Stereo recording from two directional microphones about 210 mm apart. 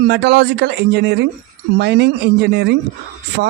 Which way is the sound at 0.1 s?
55° right (ahead or behind).